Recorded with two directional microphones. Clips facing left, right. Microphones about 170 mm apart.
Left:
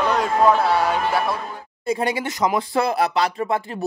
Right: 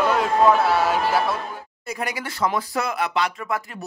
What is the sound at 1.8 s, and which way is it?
Speech, 30° left (ahead or behind).